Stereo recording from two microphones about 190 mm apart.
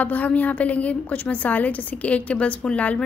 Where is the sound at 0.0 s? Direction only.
10° left (ahead or behind).